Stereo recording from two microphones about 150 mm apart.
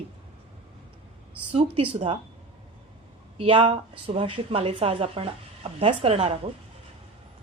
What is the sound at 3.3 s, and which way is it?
Speech, 40° right (ahead or behind).